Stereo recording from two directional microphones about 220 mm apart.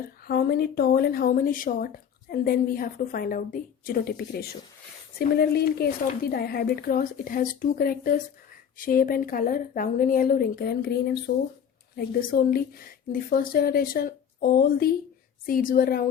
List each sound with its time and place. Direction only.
0.3 s speech: 45° left (ahead or behind)